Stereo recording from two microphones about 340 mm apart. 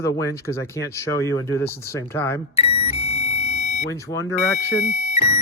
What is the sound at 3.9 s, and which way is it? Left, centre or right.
Speech, centre.